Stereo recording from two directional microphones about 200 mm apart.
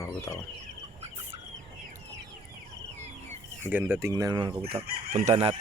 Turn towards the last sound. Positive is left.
turn(degrees=-25)  # may be behind; listen again after turning